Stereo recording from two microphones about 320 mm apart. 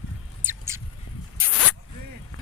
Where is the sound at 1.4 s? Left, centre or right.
Left.